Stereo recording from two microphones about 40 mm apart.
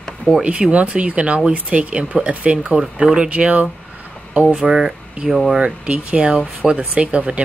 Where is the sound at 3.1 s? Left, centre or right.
Right.